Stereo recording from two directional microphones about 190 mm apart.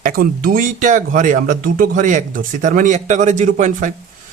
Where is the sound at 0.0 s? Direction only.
50° right (ahead or behind).